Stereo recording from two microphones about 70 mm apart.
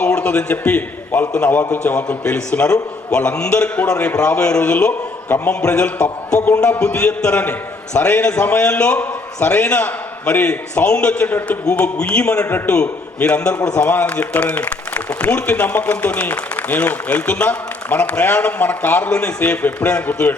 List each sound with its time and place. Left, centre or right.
0.0 s a man's voice: left